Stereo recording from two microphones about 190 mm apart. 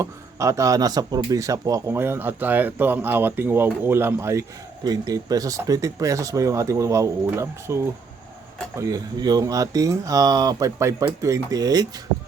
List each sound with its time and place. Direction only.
0.0 s a man's voice: 15° right (ahead or behind)